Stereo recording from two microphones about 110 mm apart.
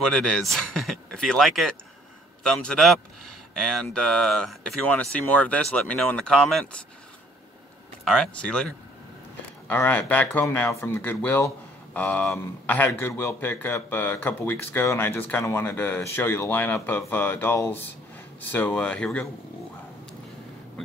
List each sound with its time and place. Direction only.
0.0 s speech: 5° left (ahead or behind)
8.0 s a man's voice: 5° left (ahead or behind)